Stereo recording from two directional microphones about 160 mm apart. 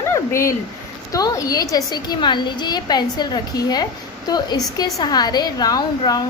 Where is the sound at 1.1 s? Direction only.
20° left (ahead or behind).